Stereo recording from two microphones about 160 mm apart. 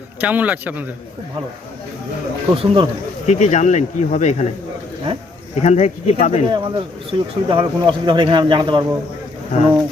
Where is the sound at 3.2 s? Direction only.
45° left (ahead or behind).